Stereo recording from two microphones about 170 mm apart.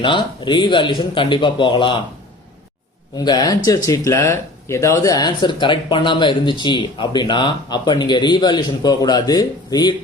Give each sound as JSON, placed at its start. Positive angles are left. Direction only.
{"t": 0.0, "sound": "speech", "side_deg": 25}
{"t": 3.2, "sound": "speech", "side_deg": 25}